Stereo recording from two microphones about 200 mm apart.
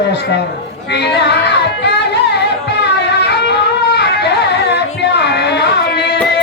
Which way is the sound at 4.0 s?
55° left (ahead or behind).